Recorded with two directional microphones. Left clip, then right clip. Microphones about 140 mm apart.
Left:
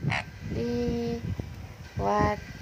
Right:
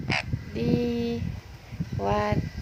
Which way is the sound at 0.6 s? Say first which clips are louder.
Right 3 dB; 10° right (ahead or behind).